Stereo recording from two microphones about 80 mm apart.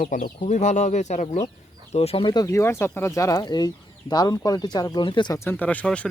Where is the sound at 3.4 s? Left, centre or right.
Left.